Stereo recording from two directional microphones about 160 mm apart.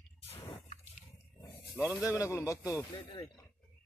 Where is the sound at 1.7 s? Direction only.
Centre (ahead or behind).